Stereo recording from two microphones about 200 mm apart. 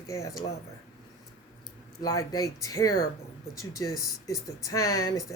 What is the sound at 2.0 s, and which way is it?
Speech, 15° left (ahead or behind).